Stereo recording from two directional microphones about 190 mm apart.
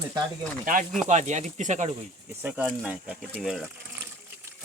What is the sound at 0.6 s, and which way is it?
Speech, 45° right (ahead or behind).